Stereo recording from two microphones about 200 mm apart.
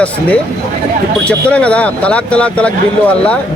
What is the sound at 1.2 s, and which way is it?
Speech, 5° left (ahead or behind).